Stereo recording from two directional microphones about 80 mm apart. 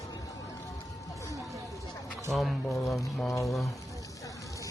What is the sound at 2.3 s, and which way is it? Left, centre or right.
Speech, centre.